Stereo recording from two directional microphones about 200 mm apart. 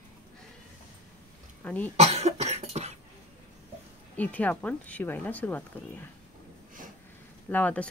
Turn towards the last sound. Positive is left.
turn(degrees=5)  # may be behind; listen again after turning